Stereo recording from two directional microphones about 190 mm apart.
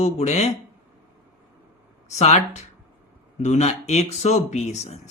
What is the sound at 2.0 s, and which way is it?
Speech, 35° left (ahead or behind).